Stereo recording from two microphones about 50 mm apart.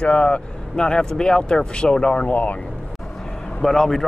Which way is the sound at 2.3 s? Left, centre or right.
Left.